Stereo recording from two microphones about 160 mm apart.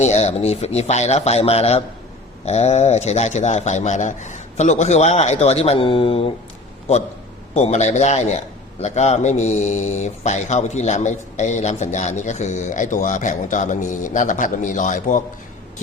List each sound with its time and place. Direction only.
0.0 s speech: 45° left (ahead or behind)
7.5 s speech: 45° left (ahead or behind)